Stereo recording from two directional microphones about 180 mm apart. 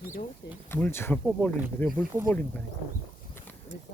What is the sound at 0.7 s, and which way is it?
Speech, 15° left (ahead or behind).